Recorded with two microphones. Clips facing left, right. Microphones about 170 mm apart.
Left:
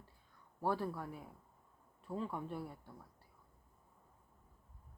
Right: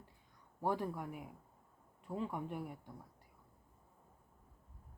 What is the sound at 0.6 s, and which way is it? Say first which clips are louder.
Speech: even; 15° right (ahead or behind).